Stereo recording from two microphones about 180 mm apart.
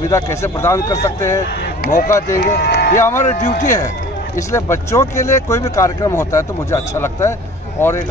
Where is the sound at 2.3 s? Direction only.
45° left (ahead or behind).